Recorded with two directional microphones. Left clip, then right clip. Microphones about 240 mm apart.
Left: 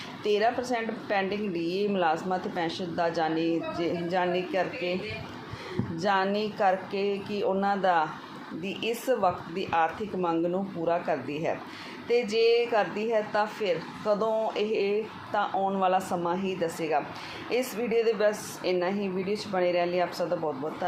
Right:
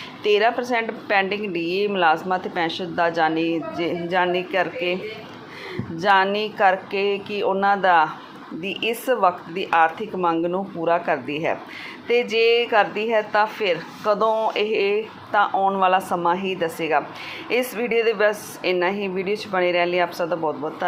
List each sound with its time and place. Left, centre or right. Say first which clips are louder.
0.2 s speech: right 7 dB; centre
6.0 s speech: right 8 dB; centre